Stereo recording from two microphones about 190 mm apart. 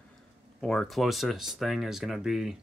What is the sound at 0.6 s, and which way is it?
Speech, 5° left (ahead or behind).